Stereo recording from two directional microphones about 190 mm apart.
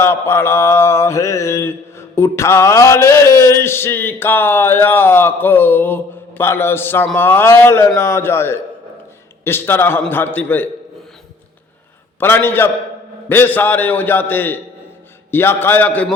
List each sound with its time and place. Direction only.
0.0 s mantra: 15° left (ahead or behind)
12.2 s mantra: 10° left (ahead or behind)